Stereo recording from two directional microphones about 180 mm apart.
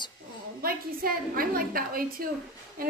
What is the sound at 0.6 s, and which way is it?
A woman's voice, 55° right (ahead or behind).